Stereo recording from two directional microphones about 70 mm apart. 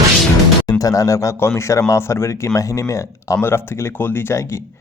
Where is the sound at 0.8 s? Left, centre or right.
Left.